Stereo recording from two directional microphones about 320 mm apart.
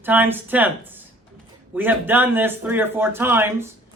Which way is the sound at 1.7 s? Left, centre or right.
Centre.